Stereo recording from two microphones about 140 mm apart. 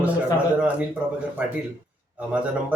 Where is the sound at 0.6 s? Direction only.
10° right (ahead or behind).